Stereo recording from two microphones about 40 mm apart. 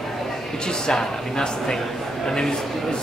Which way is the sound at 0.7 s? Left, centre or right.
Centre.